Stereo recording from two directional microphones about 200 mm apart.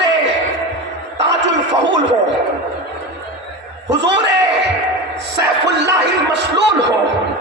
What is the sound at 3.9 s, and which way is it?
Speech, 60° right (ahead or behind).